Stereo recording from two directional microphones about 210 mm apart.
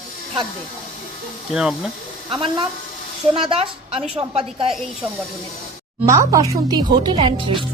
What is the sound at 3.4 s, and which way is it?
Speech, 30° right (ahead or behind).